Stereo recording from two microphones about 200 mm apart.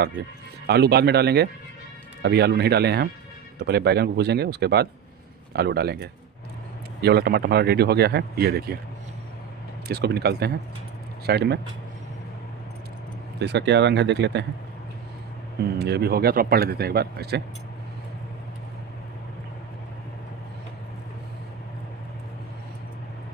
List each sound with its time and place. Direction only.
0.7 s speech: 55° right (ahead or behind)
9.8 s speech: 55° right (ahead or behind)
13.4 s speech: 60° right (ahead or behind)
15.8 s speech: 50° right (ahead or behind)